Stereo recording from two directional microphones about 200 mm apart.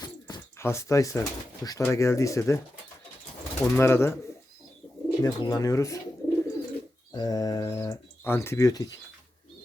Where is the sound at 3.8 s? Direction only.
10° left (ahead or behind).